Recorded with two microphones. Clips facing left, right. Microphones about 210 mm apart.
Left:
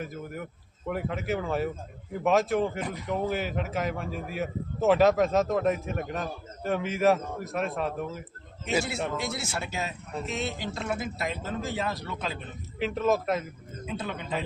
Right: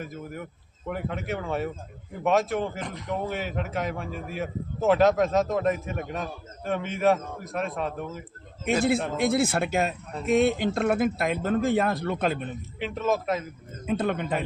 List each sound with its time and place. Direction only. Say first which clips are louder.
0.0 s a man's voice: even; centre (ahead or behind)
9.1 s a man's voice: right 9 dB; 55° right (ahead or behind)
12.8 s a man's voice: left 1 dB; centre (ahead or behind)
13.8 s a man's voice: right 8 dB; 55° right (ahead or behind)